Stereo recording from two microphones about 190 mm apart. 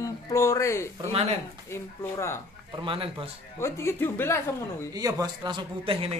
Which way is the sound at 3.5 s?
15° left (ahead or behind).